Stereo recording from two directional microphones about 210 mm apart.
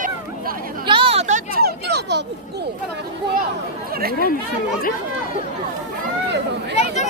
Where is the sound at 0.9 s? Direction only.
25° right (ahead or behind); by 2.6 s 55° right (ahead or behind).